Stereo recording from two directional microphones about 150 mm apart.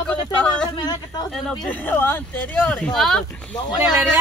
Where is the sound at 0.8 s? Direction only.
25° left (ahead or behind).